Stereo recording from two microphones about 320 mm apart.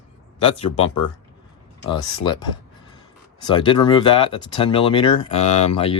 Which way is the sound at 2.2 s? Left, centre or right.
Centre.